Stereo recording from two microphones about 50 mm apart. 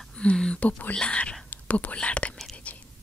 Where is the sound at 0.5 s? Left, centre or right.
Left.